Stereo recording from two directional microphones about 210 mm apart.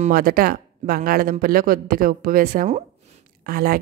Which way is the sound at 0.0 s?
45° right (ahead or behind).